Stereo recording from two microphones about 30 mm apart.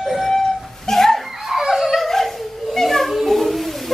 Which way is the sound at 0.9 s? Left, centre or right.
Centre.